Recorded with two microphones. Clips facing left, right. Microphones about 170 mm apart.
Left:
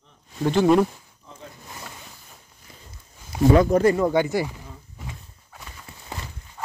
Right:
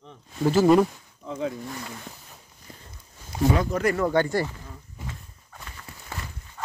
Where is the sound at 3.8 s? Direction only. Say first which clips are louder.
Left 5 dB; 25° left (ahead or behind).